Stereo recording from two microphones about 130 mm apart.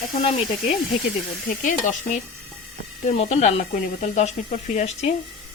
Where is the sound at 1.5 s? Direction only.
90° left.